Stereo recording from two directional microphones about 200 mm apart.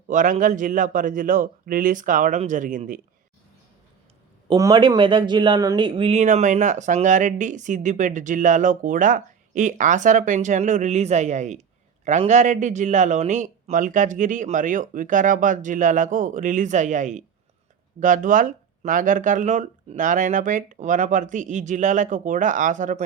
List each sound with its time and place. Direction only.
0.1 s speech: 40° right (ahead or behind)
4.4 s speech: 15° right (ahead or behind); by 23.0 s 40° right (ahead or behind)